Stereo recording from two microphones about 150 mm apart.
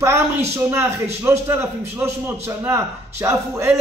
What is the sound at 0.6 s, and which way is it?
A man's voice, 15° right (ahead or behind).